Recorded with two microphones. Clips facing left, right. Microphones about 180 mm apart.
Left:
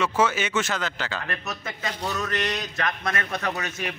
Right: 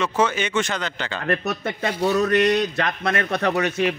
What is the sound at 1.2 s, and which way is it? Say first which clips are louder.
Speech: right 9 dB; 40° right (ahead or behind).